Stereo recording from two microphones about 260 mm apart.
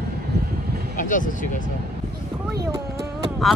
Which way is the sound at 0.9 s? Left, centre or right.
Left.